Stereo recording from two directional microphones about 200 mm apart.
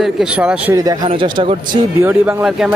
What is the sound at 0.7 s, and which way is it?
Speech, 20° right (ahead or behind).